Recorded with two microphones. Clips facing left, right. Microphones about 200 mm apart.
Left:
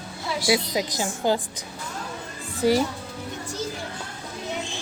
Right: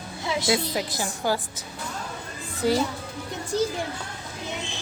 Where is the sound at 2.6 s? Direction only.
15° left (ahead or behind).